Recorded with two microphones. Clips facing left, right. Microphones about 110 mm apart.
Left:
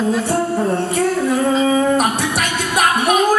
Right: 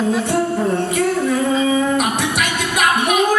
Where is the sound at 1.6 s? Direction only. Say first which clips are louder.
Left 2 dB; 40° left (ahead or behind).